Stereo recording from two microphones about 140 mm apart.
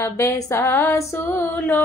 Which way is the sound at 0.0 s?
20° left (ahead or behind).